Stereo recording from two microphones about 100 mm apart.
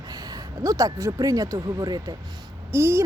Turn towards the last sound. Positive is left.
turn(degrees=-25)  # may be behind; listen again after turning